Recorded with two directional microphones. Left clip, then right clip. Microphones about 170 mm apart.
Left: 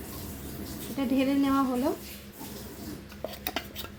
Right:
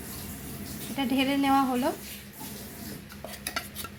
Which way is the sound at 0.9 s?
5° left (ahead or behind).